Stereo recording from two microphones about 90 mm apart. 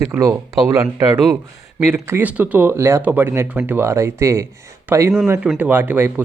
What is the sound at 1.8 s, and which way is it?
Speech, 25° right (ahead or behind).